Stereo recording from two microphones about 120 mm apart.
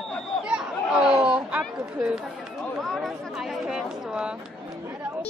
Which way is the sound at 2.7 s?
Centre (ahead or behind).